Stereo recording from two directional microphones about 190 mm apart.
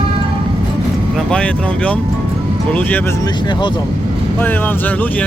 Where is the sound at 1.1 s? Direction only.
5° left (ahead or behind).